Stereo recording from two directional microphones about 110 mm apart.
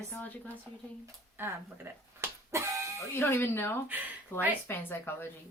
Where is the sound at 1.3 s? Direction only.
20° right (ahead or behind).